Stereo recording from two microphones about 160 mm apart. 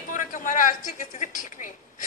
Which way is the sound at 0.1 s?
55° left (ahead or behind).